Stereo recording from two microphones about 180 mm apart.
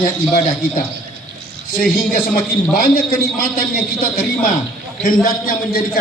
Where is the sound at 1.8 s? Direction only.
50° left (ahead or behind).